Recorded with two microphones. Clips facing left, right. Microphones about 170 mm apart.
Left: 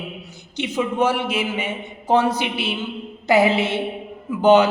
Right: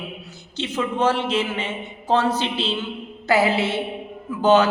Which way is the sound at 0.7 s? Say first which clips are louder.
Left 1 dB; 10° left (ahead or behind).